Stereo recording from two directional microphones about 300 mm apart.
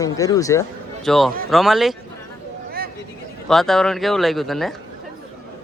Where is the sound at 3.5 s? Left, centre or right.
Centre.